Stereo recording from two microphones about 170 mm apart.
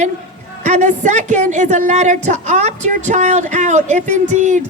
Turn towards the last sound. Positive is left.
turn(degrees=-45)  # may be behind; listen again after turning